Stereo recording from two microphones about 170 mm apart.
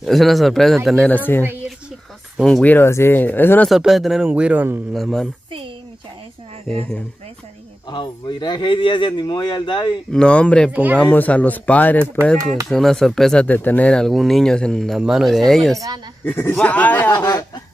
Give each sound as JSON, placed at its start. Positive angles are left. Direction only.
{"t": 0.0, "sound": "speech", "side_deg": 0}
{"t": 3.7, "sound": "speech", "side_deg": 0}
{"t": 4.9, "sound": "speech", "side_deg": 0}
{"t": 7.9, "sound": "speech", "side_deg": 25}
{"t": 10.1, "sound": "speech", "side_deg": 5}
{"t": 10.7, "sound": "speech", "side_deg": -10}
{"t": 11.0, "sound": "speech", "side_deg": 10}
{"t": 16.3, "sound": "speech", "side_deg": 15}